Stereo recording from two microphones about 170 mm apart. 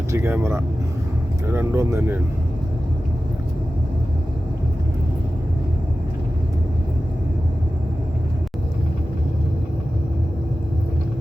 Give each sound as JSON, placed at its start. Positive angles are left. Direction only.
{"t": 0.1, "sound": "speech", "side_deg": -15}